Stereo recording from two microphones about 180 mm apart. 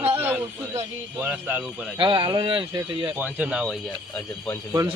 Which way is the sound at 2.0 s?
30° right (ahead or behind).